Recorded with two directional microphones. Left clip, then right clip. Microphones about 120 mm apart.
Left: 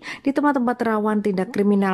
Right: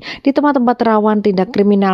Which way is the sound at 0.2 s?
30° right (ahead or behind).